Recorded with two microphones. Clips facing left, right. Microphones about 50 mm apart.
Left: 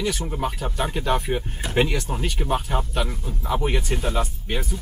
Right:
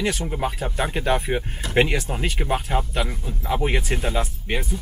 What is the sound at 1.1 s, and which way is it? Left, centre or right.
Speech, centre.